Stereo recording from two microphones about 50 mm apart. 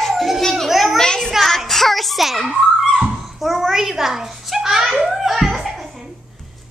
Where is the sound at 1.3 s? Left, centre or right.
Centre.